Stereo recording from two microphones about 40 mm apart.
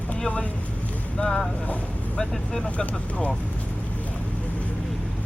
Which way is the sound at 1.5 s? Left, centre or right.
Left.